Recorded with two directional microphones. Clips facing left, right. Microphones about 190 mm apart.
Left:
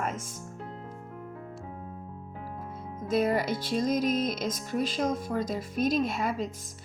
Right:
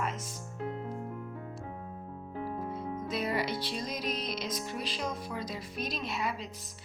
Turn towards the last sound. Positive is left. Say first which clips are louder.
# left 7 dB
turn(degrees=45)  # may be behind; listen again after turning